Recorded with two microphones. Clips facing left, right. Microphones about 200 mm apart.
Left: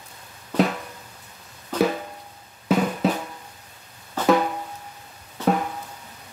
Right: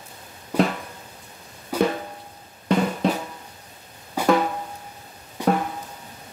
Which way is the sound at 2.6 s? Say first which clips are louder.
Even; 5° left (ahead or behind).